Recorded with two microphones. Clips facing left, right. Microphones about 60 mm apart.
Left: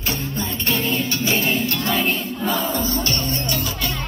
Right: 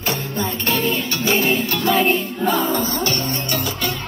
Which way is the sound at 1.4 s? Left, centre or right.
Centre.